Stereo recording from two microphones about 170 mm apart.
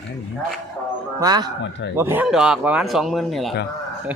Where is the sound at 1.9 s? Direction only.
15° right (ahead or behind).